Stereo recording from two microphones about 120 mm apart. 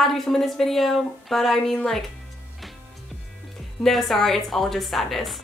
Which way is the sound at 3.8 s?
Centre (ahead or behind).